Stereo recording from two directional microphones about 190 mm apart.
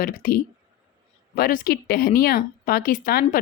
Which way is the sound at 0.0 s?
50° left (ahead or behind).